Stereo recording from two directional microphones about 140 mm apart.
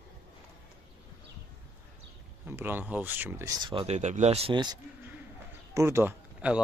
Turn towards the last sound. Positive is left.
turn(degrees=-10)  # may be behind; listen again after turning